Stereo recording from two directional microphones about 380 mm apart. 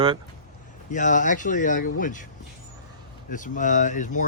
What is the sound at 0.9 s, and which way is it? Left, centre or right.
Speech, centre.